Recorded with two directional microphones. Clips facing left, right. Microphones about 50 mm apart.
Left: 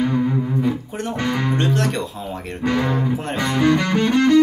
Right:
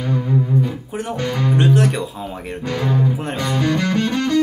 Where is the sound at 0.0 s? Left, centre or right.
Centre.